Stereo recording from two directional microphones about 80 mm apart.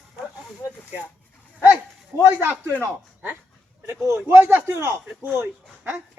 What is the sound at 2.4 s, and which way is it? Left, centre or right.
Speech, right.